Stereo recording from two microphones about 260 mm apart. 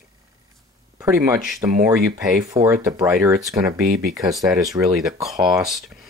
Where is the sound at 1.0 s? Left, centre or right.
Centre.